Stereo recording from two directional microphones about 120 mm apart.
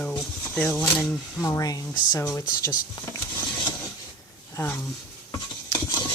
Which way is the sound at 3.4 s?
40° left (ahead or behind).